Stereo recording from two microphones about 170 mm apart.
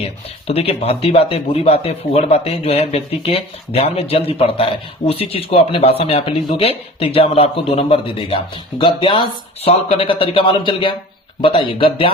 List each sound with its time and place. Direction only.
0.4 s speech: 35° left (ahead or behind)